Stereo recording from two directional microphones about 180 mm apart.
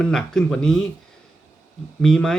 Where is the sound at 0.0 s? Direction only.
5° left (ahead or behind).